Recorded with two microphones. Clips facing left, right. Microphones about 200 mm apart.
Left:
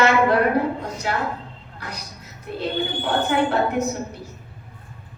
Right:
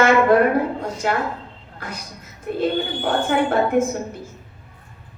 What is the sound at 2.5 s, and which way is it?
A woman's voice, 50° right (ahead or behind).